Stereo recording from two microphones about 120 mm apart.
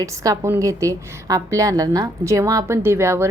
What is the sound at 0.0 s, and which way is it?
A woman's voice, 25° right (ahead or behind).